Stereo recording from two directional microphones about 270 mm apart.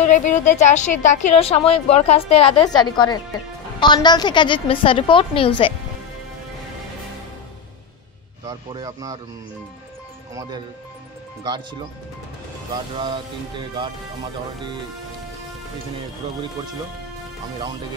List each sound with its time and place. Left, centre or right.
0.0 s a woman's voice: left
8.5 s music: centre
12.9 s music: centre